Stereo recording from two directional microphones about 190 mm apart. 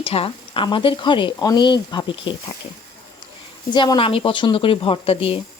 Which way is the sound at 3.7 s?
25° left (ahead or behind).